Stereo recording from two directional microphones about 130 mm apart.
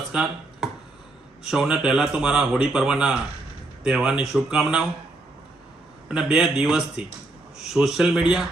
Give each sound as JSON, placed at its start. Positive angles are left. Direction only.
{"t": 0.1, "sound": "a sound", "side_deg": -5}
{"t": 1.5, "sound": "speech", "side_deg": -5}
{"t": 6.1, "sound": "speech", "side_deg": -5}